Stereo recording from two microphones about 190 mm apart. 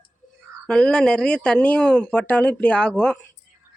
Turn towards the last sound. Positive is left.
turn(degrees=5)  # may be behind; listen again after turning